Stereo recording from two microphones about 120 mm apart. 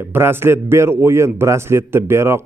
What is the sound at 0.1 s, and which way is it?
A man's voice, 20° right (ahead or behind).